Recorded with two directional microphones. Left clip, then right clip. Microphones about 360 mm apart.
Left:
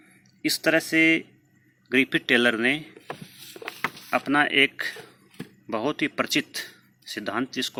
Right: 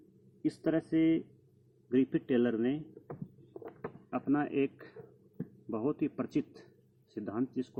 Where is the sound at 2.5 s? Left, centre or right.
Centre.